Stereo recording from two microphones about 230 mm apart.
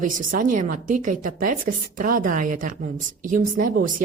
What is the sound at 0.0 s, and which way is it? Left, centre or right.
A woman's voice, right.